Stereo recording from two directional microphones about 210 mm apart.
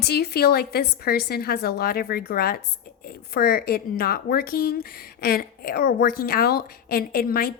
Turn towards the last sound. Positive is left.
turn(degrees=45)  # may be behind; listen again after turning